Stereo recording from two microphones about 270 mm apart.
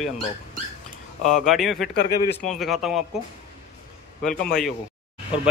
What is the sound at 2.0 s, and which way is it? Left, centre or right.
Speech, left.